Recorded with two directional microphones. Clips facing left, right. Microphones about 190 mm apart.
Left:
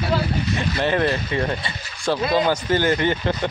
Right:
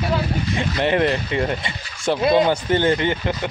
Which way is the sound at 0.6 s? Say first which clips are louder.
Right 3 dB; 20° right (ahead or behind).